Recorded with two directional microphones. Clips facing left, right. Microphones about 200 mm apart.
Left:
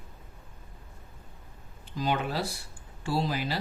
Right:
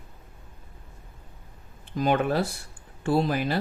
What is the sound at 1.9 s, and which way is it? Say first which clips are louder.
Speech: right 6 dB; 55° right (ahead or behind).